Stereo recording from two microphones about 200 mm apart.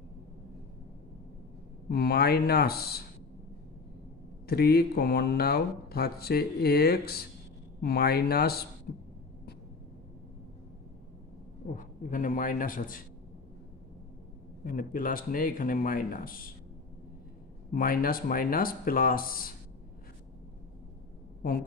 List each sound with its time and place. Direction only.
1.9 s speech: 50° left (ahead or behind)
4.5 s speech: 50° left (ahead or behind)
11.7 s speech: 40° left (ahead or behind)
14.6 s speech: 45° left (ahead or behind)
17.6 s speech: 45° left (ahead or behind)